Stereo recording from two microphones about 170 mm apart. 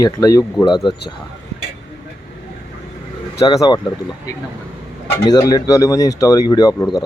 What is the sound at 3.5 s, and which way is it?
Speech, 20° left (ahead or behind).